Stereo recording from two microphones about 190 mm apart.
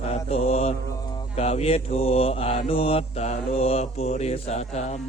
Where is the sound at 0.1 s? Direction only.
35° left (ahead or behind).